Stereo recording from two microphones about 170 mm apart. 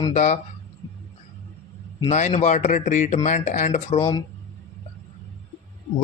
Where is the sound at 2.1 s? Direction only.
40° left (ahead or behind).